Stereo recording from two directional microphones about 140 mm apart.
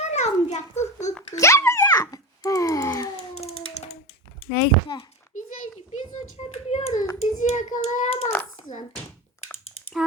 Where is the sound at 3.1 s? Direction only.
45° left (ahead or behind).